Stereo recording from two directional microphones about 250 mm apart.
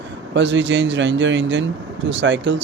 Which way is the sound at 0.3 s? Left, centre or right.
Right.